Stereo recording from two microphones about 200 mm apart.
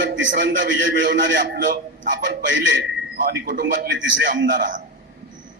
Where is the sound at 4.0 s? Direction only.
70° right (ahead or behind).